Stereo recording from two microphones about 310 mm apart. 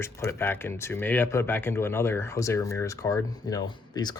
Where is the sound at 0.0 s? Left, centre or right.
Centre.